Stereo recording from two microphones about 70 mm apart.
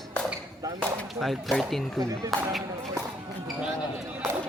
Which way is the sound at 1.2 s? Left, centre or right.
Centre.